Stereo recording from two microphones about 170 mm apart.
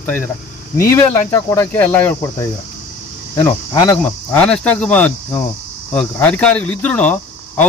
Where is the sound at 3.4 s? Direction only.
20° left (ahead or behind).